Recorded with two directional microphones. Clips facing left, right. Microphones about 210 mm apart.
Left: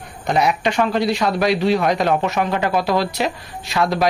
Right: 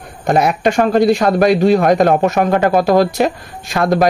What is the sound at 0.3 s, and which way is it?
A man's voice, 50° right (ahead or behind).